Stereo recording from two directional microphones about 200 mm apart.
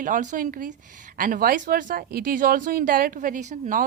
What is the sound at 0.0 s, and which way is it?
A woman's voice, 40° right (ahead or behind).